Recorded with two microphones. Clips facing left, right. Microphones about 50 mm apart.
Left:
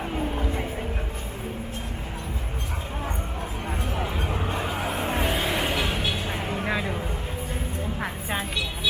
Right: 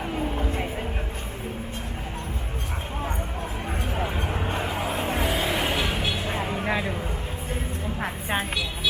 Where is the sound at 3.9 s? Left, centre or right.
Right.